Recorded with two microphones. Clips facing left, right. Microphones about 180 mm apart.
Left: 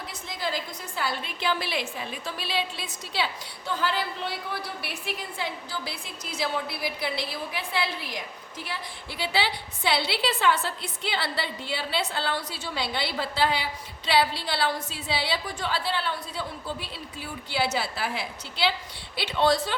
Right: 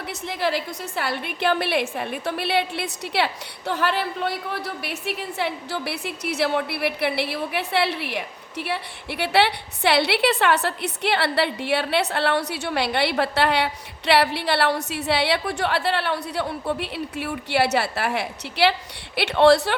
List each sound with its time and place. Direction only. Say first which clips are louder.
0.1 s a woman's voice: right 8 dB; 65° right (ahead or behind)